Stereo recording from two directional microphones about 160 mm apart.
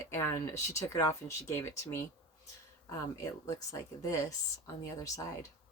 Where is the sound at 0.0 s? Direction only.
20° left (ahead or behind).